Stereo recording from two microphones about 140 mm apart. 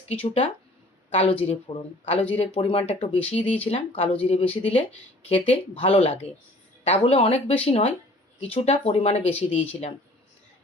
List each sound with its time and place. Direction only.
0.2 s speech: 40° left (ahead or behind)